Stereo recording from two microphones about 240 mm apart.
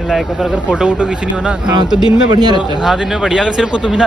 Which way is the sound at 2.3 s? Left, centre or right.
Centre.